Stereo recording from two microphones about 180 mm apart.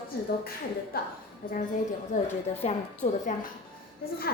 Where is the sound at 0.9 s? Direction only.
55° left (ahead or behind).